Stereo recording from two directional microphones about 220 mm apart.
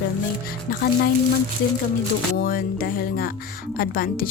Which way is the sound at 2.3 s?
40° left (ahead or behind).